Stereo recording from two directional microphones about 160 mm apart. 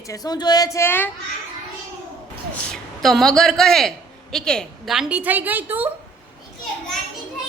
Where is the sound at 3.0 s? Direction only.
Centre (ahead or behind).